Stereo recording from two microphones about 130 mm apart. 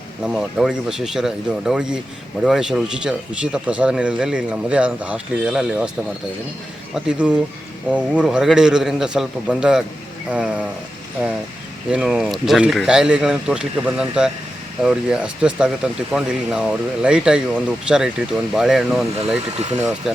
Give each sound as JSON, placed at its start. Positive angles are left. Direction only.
{"t": 0.2, "sound": "a man's voice", "side_deg": -5}
{"t": 6.9, "sound": "a man's voice", "side_deg": -5}